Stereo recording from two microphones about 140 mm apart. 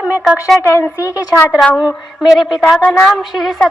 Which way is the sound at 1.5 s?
5° right (ahead or behind).